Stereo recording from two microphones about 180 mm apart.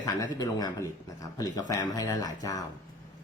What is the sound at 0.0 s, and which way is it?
Speech, 20° left (ahead or behind).